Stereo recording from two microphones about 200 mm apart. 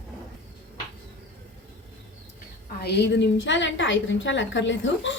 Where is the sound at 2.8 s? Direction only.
55° left (ahead or behind).